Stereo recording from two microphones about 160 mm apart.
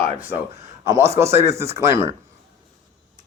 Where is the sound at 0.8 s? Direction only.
20° right (ahead or behind).